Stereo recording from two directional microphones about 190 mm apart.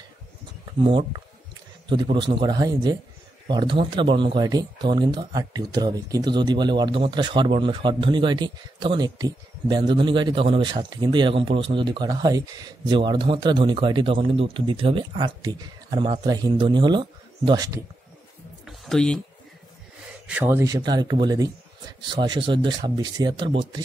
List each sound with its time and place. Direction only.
0.7 s speech: 30° right (ahead or behind)
18.7 s a sound: centre (ahead or behind)
20.2 s speech: 10° right (ahead or behind)